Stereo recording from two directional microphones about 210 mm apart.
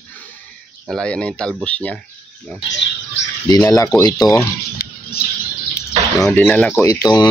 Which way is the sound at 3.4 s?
15° left (ahead or behind).